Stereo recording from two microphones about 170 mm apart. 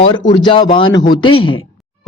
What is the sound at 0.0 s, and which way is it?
A woman's voice, 25° left (ahead or behind).